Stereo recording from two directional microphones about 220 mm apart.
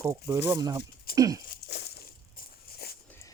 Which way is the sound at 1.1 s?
15° right (ahead or behind).